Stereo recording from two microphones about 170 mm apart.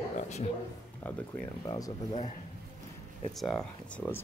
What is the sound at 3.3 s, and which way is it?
Speech, centre (ahead or behind).